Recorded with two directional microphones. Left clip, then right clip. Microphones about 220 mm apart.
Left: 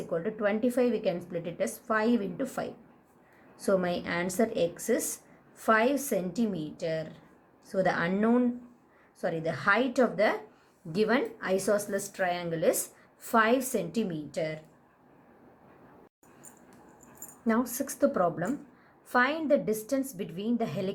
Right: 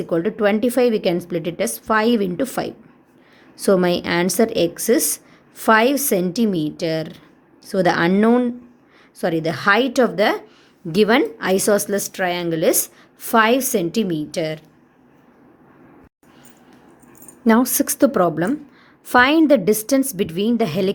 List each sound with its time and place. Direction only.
0.0 s a woman's voice: 45° right (ahead or behind)
17.4 s a woman's voice: 45° right (ahead or behind)